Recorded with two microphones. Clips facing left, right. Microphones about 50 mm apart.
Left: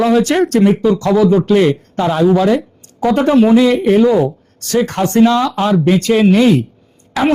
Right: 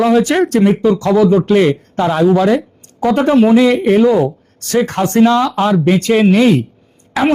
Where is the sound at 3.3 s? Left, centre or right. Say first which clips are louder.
Even; right.